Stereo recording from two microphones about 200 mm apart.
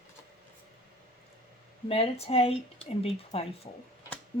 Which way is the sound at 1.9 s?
30° left (ahead or behind).